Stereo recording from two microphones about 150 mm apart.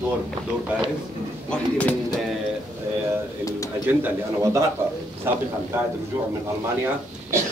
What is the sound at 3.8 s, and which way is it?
Speech, 15° right (ahead or behind).